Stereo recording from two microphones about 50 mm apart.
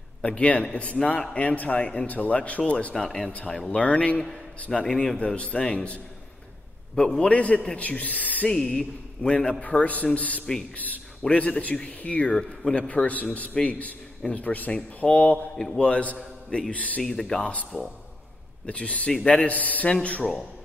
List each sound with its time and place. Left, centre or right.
0.2 s a man's voice: left
3.8 s speech: left
4.6 s a man's voice: centre
5.2 s speech: left
7.2 s speech: left
8.5 s a man's voice: centre; by 15.0 s left
15.0 s speech: left
15.5 s a man's voice: centre
15.8 s speech: left
17.0 s a man's voice: centre
18.7 s a man's voice: left